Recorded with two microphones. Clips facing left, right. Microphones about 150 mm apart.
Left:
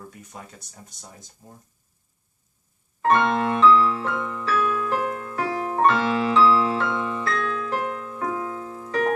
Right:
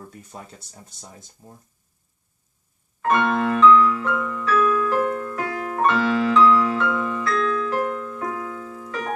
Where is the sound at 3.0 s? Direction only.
30° left (ahead or behind).